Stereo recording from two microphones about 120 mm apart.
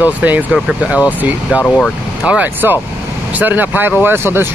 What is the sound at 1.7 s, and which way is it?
Speech, 10° left (ahead or behind).